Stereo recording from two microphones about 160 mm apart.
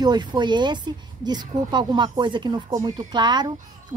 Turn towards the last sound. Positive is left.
turn(degrees=-25)  # may be behind; listen again after turning